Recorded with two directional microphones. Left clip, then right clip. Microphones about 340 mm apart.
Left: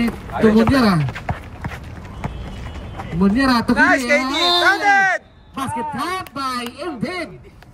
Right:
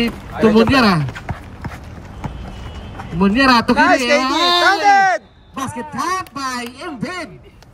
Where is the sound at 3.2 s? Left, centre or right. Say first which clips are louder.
Right 5 dB; centre.